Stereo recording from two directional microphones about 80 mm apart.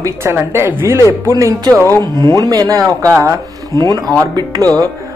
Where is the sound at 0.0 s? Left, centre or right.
Right.